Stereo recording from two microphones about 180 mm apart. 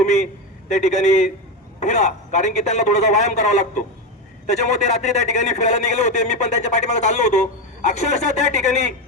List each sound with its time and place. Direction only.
0.0 s a man's voice: 40° left (ahead or behind)